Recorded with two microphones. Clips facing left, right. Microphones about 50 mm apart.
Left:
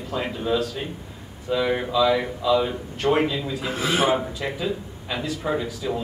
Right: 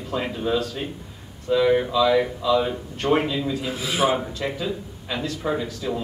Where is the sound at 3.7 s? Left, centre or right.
Left.